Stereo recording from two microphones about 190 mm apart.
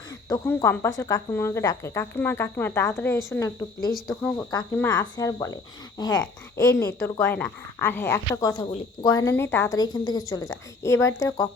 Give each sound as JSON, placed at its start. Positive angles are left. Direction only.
{"t": 0.1, "sound": "speech", "side_deg": 15}
{"t": 3.9, "sound": "speech", "side_deg": 0}
{"t": 4.5, "sound": "speech", "side_deg": 20}